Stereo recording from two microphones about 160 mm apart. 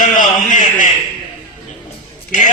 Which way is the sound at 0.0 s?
55° left (ahead or behind).